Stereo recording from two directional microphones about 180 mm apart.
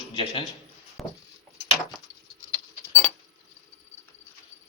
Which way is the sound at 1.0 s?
Centre (ahead or behind).